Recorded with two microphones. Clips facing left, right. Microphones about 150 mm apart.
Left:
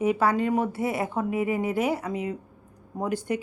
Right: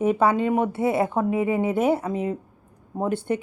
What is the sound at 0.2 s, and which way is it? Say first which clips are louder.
Speech: right 3 dB; 25° right (ahead or behind).